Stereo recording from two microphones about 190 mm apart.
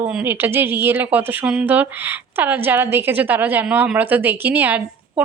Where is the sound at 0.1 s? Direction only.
10° right (ahead or behind).